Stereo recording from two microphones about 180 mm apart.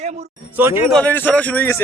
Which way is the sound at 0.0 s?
40° right (ahead or behind).